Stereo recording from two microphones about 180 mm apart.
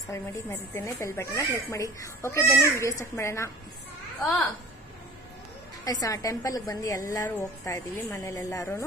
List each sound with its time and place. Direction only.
0.1 s speech: 15° left (ahead or behind)
5.9 s a woman's voice: 20° left (ahead or behind)